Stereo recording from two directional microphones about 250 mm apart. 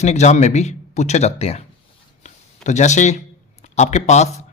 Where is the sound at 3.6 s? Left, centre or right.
Left.